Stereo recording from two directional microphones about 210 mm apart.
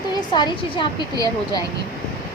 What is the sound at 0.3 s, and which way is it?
Speech, 20° left (ahead or behind).